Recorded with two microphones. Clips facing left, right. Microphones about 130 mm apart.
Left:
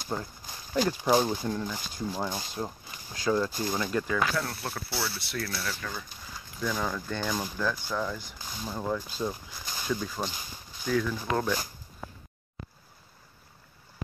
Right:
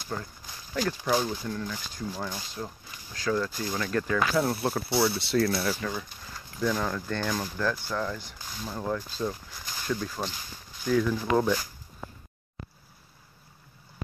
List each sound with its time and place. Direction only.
0.1 s speech: 20° left (ahead or behind)
4.4 s speech: 20° right (ahead or behind)
5.8 s speech: 15° right (ahead or behind)
6.6 s speech: centre (ahead or behind)